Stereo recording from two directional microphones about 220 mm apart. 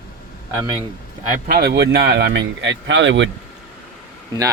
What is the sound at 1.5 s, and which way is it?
A man's voice, 45° right (ahead or behind).